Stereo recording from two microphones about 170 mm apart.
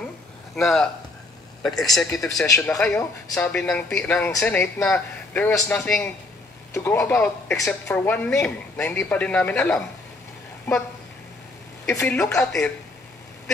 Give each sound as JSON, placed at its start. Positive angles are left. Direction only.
{"t": 0.6, "sound": "speech", "side_deg": 0}
{"t": 2.4, "sound": "speech", "side_deg": 20}
{"t": 2.7, "sound": "speech", "side_deg": 5}
{"t": 6.7, "sound": "speech", "side_deg": 15}
{"t": 12.0, "sound": "speech", "side_deg": 10}